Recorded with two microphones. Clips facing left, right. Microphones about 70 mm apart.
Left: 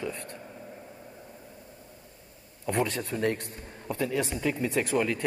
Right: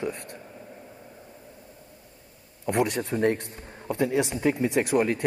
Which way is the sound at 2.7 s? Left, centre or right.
Centre.